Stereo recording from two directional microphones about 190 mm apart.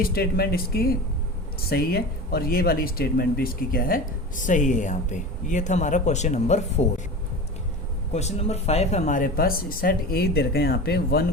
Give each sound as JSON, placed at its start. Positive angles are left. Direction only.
{"t": 0.0, "sound": "speech", "side_deg": 55}
{"t": 8.1, "sound": "speech", "side_deg": 35}